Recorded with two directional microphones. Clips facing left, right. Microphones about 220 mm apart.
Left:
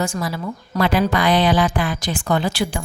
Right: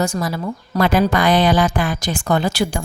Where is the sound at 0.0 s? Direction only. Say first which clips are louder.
Right 3 dB; 40° right (ahead or behind).